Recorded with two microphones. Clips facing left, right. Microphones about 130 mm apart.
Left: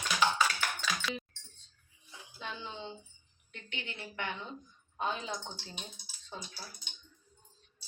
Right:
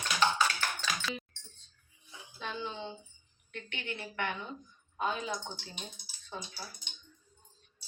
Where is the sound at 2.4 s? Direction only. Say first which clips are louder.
Right 4 dB; 15° left (ahead or behind).